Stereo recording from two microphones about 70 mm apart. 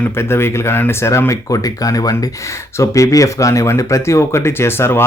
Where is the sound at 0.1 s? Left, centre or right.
Left.